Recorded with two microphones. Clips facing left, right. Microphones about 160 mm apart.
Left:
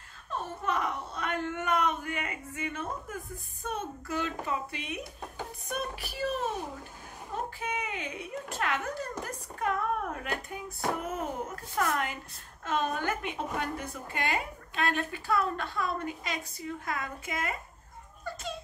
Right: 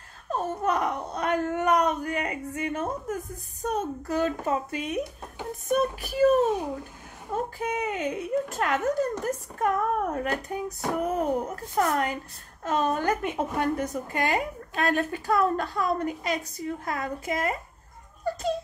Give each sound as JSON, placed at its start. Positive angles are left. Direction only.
{"t": 0.3, "sound": "a woman's voice", "side_deg": -40}
{"t": 7.5, "sound": "a woman's voice", "side_deg": -40}
{"t": 18.2, "sound": "a sound", "side_deg": -40}